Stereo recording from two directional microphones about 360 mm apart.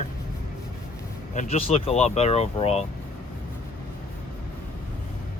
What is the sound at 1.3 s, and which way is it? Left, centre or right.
Speech, centre.